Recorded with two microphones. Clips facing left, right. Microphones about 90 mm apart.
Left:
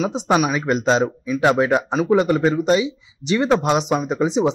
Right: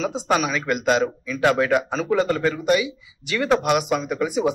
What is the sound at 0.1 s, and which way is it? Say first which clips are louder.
Speech: left 3 dB; 20° left (ahead or behind).